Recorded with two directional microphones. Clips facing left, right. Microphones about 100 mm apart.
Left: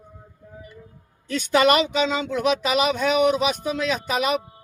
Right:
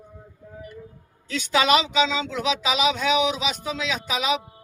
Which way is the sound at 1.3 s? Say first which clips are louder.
Left 2 dB; 50° left (ahead or behind).